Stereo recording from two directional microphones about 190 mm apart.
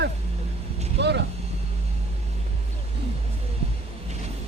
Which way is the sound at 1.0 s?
65° right (ahead or behind).